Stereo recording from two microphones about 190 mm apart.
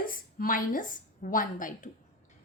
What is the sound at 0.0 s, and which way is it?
A woman's voice, 50° left (ahead or behind).